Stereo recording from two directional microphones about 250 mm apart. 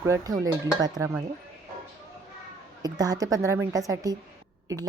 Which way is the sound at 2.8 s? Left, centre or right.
Centre.